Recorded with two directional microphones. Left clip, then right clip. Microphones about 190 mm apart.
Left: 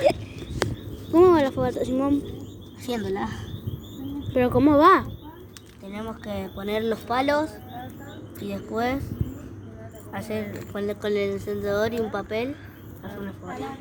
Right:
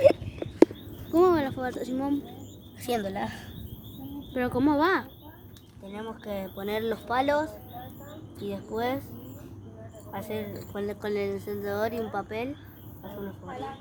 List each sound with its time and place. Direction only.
1.1 s speech: centre (ahead or behind)
2.8 s speech: 35° right (ahead or behind)
4.4 s speech: 5° left (ahead or behind)
5.9 s speech: 5° right (ahead or behind)
10.1 s speech: 5° right (ahead or behind)